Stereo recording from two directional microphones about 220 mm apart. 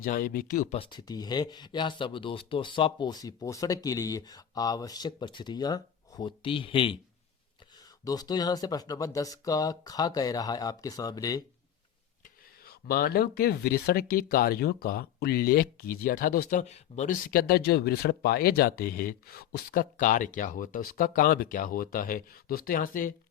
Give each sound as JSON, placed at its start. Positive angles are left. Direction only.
{"t": 0.0, "sound": "speech", "side_deg": 40}
{"t": 0.8, "sound": "speech", "side_deg": 20}
{"t": 8.0, "sound": "speech", "side_deg": 15}
{"t": 12.6, "sound": "speech", "side_deg": 45}